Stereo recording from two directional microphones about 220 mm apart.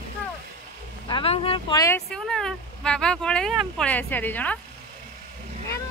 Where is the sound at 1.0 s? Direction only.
25° left (ahead or behind).